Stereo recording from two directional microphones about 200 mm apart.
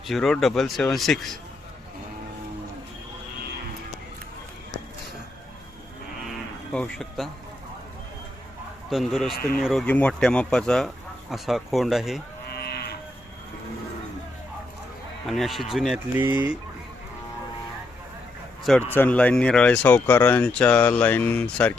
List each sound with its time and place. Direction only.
0.1 s speech: centre (ahead or behind)
6.7 s speech: 5° left (ahead or behind)
8.9 s speech: centre (ahead or behind)
12.5 s livestock: 55° left (ahead or behind)
15.3 s speech: centre (ahead or behind)
18.9 s speech: 10° left (ahead or behind)